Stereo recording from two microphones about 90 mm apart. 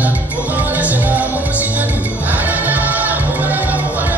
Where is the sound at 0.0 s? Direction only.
20° right (ahead or behind).